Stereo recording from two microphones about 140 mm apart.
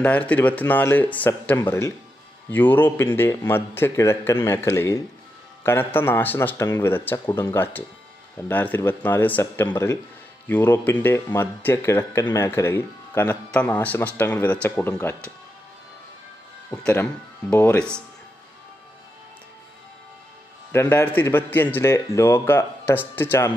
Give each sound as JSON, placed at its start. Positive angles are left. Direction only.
{"t": 0.3, "sound": "speech", "side_deg": 10}
{"t": 16.7, "sound": "speech", "side_deg": 5}
{"t": 20.7, "sound": "speech", "side_deg": 15}